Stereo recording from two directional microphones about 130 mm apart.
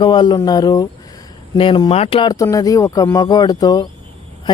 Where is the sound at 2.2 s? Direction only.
25° left (ahead or behind).